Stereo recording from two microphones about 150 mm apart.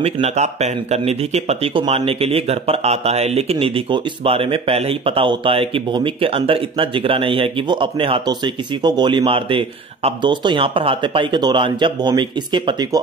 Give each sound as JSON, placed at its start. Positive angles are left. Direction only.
{"t": 0.0, "sound": "speech", "side_deg": -45}